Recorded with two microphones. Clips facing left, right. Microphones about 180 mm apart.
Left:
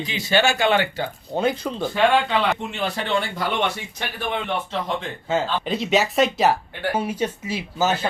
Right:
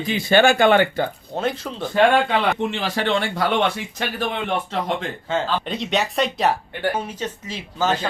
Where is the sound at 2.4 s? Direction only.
90° right.